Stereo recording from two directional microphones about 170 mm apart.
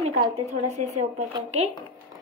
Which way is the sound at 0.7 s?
40° right (ahead or behind).